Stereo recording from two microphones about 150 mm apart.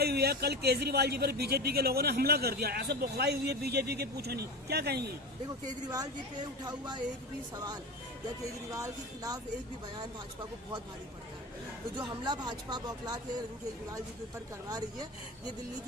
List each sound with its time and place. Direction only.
0.0 s a man's voice: 90° right
5.9 s speech: 25° right (ahead or behind)
11.9 s speech: 30° right (ahead or behind)